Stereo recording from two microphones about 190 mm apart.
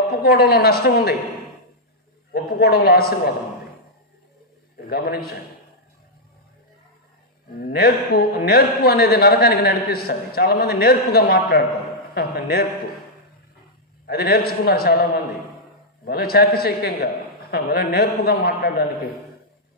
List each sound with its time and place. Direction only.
0.1 s a woman's voice: 55° left (ahead or behind)
2.3 s a man's voice: 55° left (ahead or behind)
4.7 s a man's voice: 55° left (ahead or behind)
7.6 s a man's voice: 55° left (ahead or behind)
14.0 s a man's voice: 55° left (ahead or behind)
16.1 s a man's voice: 55° left (ahead or behind)